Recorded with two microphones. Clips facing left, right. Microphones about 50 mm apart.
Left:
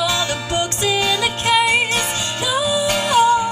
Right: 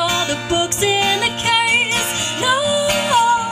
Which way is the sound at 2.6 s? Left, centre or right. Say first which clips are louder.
Right 1 dB; centre.